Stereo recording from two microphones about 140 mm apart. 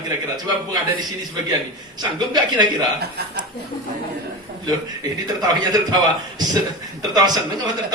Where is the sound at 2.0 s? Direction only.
30° right (ahead or behind).